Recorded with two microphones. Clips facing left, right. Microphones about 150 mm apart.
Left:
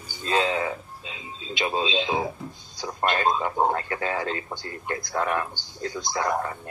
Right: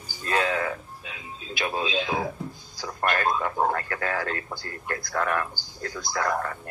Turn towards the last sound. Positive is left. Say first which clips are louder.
# left 1 dB
turn(degrees=20)  # may be behind; listen again after turning